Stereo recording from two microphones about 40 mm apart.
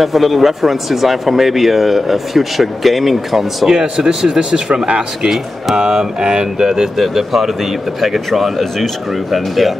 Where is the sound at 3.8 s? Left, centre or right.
Right.